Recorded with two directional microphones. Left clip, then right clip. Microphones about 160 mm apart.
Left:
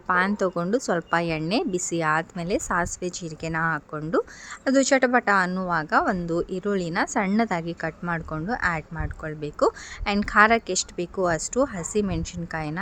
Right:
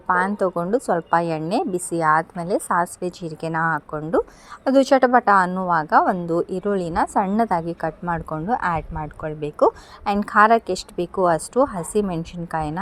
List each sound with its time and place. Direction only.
0.3 s a woman's voice: 5° left (ahead or behind)
2.0 s a woman's voice: 25° left (ahead or behind)
2.6 s a woman's voice: 5° left (ahead or behind)
4.6 s a woman's voice: 10° right (ahead or behind)